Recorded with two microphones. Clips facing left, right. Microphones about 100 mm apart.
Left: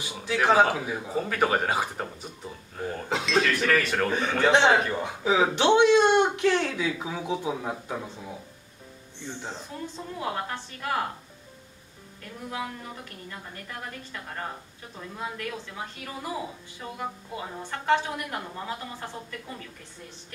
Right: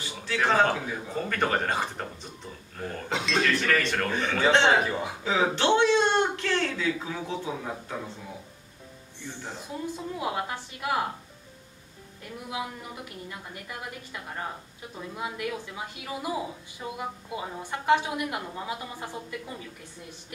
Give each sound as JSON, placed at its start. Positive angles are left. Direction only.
{"t": 0.0, "sound": "speech", "side_deg": 15}
{"t": 4.8, "sound": "a man's voice", "side_deg": -5}
{"t": 5.2, "sound": "speech", "side_deg": 15}
{"t": 9.2, "sound": "speech", "side_deg": 20}
{"t": 9.6, "sound": "a woman's voice", "side_deg": -10}
{"t": 12.2, "sound": "a woman's voice", "side_deg": -15}